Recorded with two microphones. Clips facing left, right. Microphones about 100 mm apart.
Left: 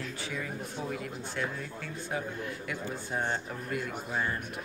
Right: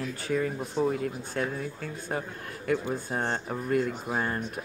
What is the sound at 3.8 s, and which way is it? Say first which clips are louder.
Speech: right 3 dB; 40° right (ahead or behind).